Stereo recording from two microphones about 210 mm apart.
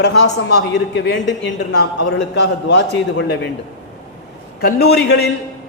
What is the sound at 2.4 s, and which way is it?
A man's voice, 55° left (ahead or behind).